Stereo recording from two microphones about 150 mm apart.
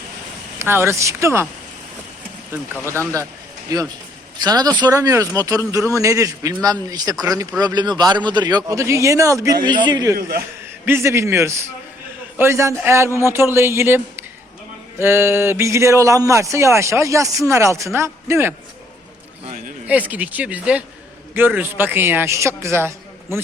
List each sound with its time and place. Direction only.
0.6 s a man's voice: 15° right (ahead or behind)
3.7 s speech: 25° right (ahead or behind)
9.6 s speech: 30° right (ahead or behind)
10.2 s a man's voice: 75° right (ahead or behind)
10.8 s a man's voice: 15° right (ahead or behind)
19.9 s a man's voice: 10° right (ahead or behind)